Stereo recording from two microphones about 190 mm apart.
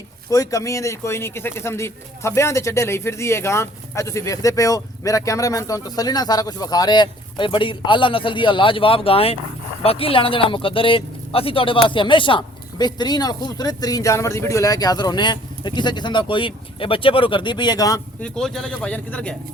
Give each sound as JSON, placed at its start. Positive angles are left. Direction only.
{"t": 0.3, "sound": "a man's voice", "side_deg": 15}
{"t": 18.2, "sound": "speech", "side_deg": 5}